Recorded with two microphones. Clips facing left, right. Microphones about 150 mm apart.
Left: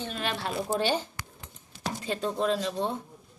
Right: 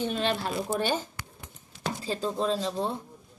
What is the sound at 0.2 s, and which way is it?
Speech, 30° right (ahead or behind).